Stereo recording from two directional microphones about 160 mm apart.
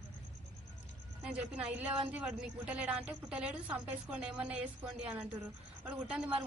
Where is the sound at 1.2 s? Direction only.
10° right (ahead or behind).